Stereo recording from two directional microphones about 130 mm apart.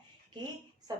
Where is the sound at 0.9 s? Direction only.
30° right (ahead or behind).